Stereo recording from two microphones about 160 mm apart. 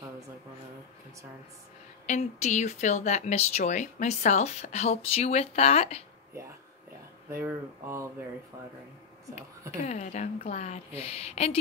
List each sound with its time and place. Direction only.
2.0 s speech: 45° left (ahead or behind)
7.2 s speech: 15° right (ahead or behind)
9.8 s a woman's voice: 45° left (ahead or behind)